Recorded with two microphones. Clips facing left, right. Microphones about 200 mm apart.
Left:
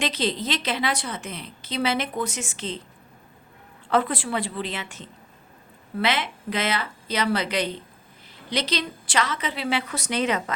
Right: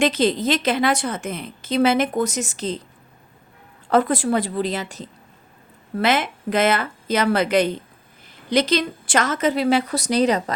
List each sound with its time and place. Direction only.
0.0 s a woman's voice: 50° right (ahead or behind)
3.8 s a woman's voice: 45° right (ahead or behind)